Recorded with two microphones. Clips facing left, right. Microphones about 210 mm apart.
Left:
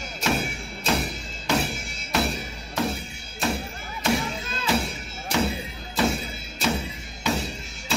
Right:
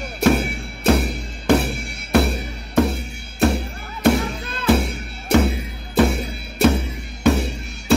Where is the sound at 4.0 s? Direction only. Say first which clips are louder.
Right 8 dB; 60° right (ahead or behind).